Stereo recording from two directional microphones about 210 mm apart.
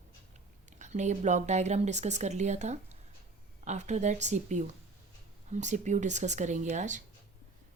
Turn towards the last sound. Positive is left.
turn(degrees=-35)  # may be behind; listen again after turning